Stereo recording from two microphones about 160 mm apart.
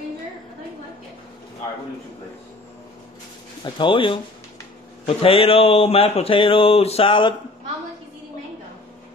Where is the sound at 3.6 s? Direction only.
30° left (ahead or behind).